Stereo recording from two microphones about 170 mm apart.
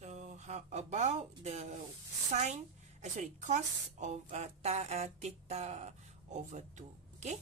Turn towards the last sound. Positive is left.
turn(degrees=-45)  # may be behind; listen again after turning